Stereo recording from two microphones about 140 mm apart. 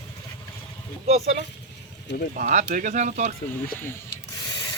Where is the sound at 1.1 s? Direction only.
50° right (ahead or behind).